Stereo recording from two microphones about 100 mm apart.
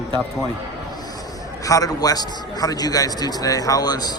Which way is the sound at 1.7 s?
35° left (ahead or behind).